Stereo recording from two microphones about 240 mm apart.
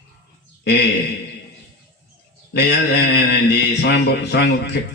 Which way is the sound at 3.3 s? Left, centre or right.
Left.